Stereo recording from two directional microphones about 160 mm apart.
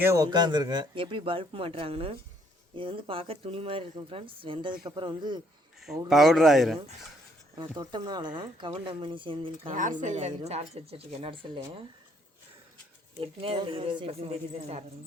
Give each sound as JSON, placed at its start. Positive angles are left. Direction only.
{"t": 0.0, "sound": "speech", "side_deg": -20}
{"t": 6.1, "sound": "speech", "side_deg": 0}
{"t": 7.5, "sound": "speech", "side_deg": -25}
{"t": 9.6, "sound": "speech", "side_deg": -55}
{"t": 13.1, "sound": "speech", "side_deg": -35}